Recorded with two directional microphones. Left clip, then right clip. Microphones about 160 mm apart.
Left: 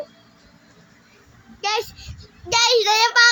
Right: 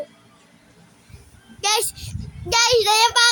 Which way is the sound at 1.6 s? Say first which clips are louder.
Right 2 dB; 25° right (ahead or behind).